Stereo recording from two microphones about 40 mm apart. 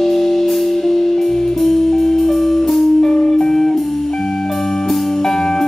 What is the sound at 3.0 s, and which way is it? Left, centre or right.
Music, centre.